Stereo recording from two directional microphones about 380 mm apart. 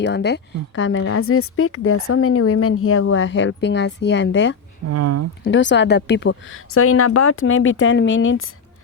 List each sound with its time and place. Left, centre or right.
0.0 s a woman's voice: left
4.9 s speech: right
5.4 s a woman's voice: left